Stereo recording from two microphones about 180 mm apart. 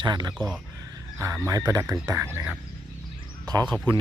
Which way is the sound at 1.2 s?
15° right (ahead or behind).